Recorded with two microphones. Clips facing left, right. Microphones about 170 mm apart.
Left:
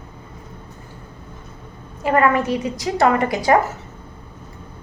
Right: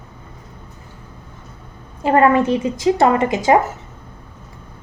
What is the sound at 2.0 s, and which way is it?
A woman's voice, 30° right (ahead or behind).